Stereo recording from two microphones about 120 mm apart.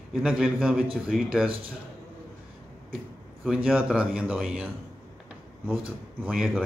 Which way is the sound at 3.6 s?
5° right (ahead or behind).